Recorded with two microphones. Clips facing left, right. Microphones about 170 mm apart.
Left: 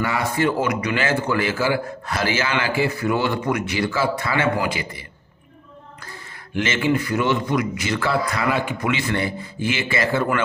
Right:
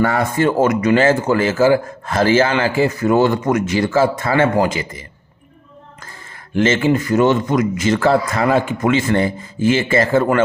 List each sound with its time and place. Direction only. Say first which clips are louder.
0.0 s speech: right 5 dB; 50° right (ahead or behind)
6.6 s speech: right 6 dB; 45° right (ahead or behind)